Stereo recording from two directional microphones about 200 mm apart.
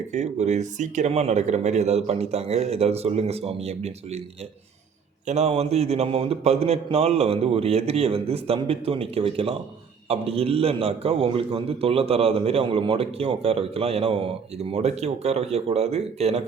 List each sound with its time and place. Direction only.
0.1 s a man's voice: 35° right (ahead or behind)
5.2 s a man's voice: 35° right (ahead or behind)